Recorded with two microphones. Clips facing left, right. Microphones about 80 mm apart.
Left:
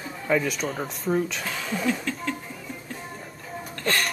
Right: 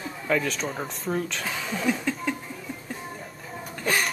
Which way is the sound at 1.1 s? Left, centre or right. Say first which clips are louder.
Left 3 dB; centre.